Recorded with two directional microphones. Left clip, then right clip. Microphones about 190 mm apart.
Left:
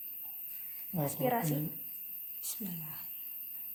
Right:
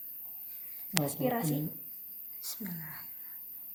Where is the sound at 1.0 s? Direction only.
20° left (ahead or behind).